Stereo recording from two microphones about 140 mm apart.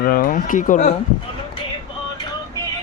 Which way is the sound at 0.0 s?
80° left.